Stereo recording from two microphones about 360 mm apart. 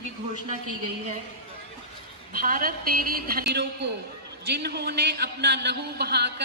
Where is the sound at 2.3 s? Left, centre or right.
Right.